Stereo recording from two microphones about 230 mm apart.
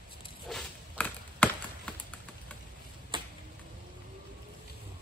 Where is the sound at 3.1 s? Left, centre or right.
Right.